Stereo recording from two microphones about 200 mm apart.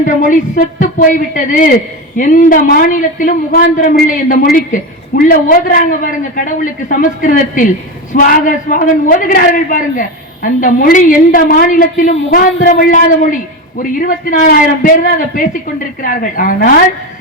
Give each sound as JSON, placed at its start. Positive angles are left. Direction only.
{"t": 0.0, "sound": "a woman's voice", "side_deg": 40}